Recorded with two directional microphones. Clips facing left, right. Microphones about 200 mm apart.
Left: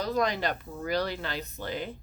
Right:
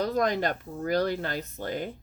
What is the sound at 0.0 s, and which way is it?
Speech, 50° right (ahead or behind).